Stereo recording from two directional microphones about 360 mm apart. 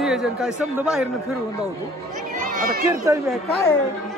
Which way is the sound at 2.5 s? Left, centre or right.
Right.